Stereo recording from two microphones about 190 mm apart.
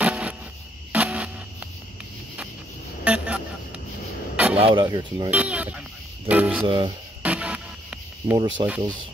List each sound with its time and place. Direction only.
0.0 s music: 5° right (ahead or behind)
0.9 s printer: 5° right (ahead or behind)
3.0 s vehicle: 5° right (ahead or behind)
4.6 s speech: 30° right (ahead or behind)
5.3 s speech: 5° right (ahead or behind)
6.6 s speech: 25° right (ahead or behind)
7.2 s music: 5° right (ahead or behind)
8.6 s speech: 25° right (ahead or behind)